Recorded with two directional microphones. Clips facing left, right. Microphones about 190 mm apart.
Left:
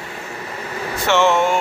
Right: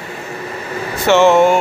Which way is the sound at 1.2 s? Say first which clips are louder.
Right 7 dB; 40° right (ahead or behind).